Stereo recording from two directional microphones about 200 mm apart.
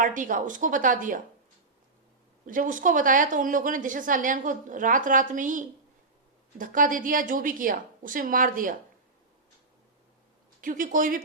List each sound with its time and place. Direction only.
0.0 s a woman's voice: 40° right (ahead or behind)
2.5 s a woman's voice: 40° right (ahead or behind)
10.6 s a woman's voice: 40° right (ahead or behind)